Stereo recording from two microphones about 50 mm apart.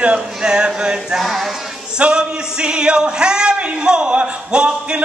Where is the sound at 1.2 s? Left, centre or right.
Centre; by 5.0 s right.